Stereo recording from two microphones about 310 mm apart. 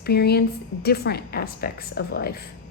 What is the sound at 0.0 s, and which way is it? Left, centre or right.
Speech, left.